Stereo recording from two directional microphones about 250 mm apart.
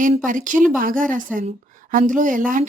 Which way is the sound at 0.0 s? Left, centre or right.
Right.